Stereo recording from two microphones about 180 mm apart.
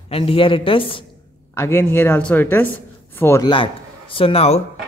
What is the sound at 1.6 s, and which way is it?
Speech, 15° left (ahead or behind).